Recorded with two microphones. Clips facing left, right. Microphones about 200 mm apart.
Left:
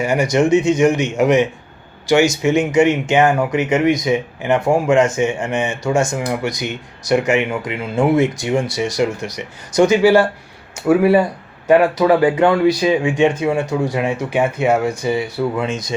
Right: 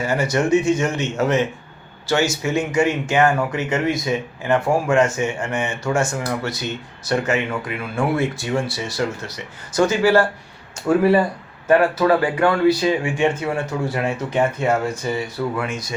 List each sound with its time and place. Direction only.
0.0 s speech: 15° left (ahead or behind)
5.8 s speech: 15° left (ahead or behind)